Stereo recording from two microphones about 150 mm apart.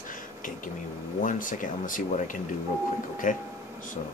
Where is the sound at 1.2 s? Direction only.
60° left (ahead or behind).